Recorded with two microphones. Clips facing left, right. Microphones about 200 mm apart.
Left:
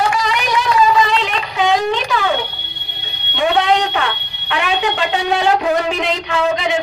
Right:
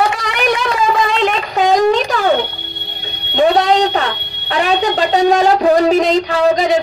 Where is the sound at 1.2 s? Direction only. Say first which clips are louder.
Right 4 dB; 45° right (ahead or behind).